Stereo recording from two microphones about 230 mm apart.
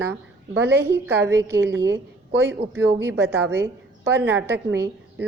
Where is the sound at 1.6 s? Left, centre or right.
Right.